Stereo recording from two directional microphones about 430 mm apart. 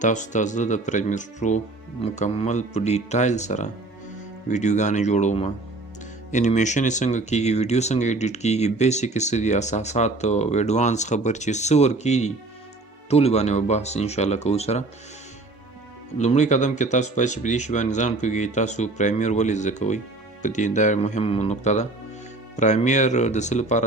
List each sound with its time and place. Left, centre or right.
0.0 s speech: centre
16.1 s speech: centre